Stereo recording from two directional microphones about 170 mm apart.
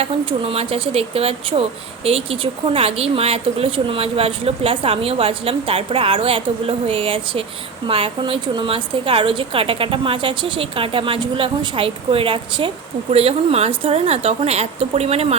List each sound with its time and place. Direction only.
0.0 s a woman's voice: 35° right (ahead or behind)